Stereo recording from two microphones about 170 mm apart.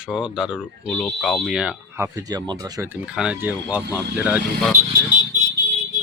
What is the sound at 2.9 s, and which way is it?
Speech, 5° right (ahead or behind).